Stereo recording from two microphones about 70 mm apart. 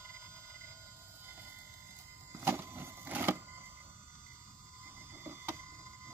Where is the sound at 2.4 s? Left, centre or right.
Right.